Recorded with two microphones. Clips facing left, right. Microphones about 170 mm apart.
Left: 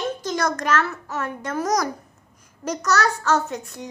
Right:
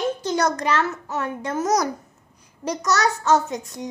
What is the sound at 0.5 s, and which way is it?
A child's voice, 15° right (ahead or behind).